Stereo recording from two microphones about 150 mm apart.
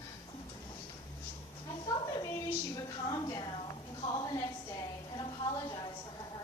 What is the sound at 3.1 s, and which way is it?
Music, 25° left (ahead or behind).